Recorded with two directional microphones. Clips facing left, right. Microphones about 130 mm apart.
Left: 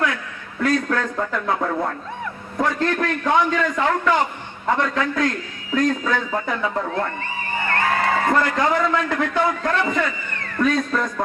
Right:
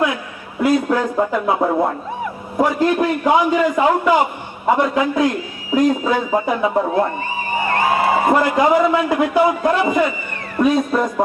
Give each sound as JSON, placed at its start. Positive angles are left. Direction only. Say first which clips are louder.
{"t": 0.6, "sound": "a man's voice", "louder": "right 5 dB", "side_deg": -10}